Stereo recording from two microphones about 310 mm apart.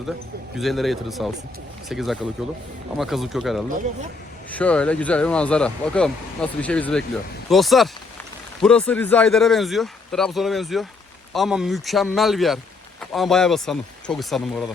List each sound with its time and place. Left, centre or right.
0.6 s speech: centre